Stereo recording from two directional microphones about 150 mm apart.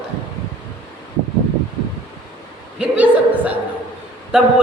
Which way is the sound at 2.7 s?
10° right (ahead or behind).